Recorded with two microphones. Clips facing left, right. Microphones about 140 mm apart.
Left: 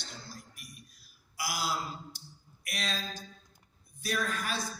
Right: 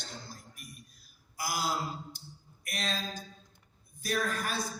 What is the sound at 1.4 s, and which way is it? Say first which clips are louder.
A man's voice: right 1 dB; 50° right (ahead or behind).